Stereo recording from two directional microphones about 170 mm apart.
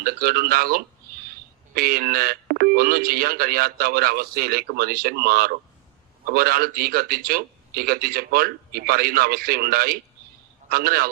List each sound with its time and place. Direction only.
0.0 s speech: 60° right (ahead or behind)